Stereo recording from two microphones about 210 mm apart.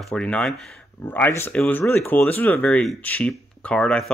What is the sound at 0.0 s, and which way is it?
Speech, 5° left (ahead or behind).